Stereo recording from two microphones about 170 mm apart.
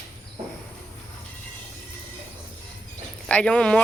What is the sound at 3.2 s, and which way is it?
Speech, 5° left (ahead or behind).